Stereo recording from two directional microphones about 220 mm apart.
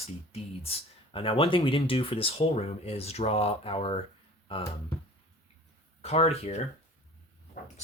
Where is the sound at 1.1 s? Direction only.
25° left (ahead or behind).